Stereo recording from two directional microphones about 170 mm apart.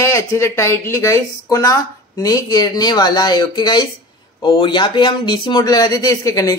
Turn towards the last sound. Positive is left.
turn(degrees=20)  # may be behind; listen again after turning